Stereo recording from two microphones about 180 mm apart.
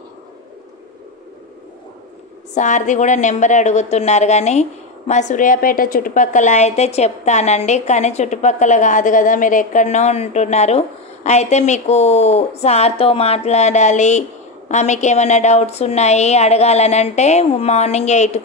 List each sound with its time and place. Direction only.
2.5 s a woman's voice: 45° left (ahead or behind)